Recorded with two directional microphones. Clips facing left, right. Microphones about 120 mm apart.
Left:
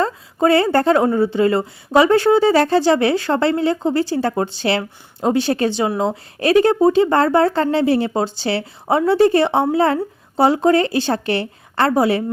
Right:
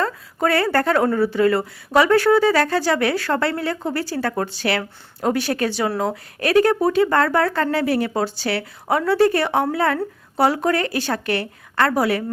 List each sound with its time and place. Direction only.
0.0 s speech: 25° left (ahead or behind)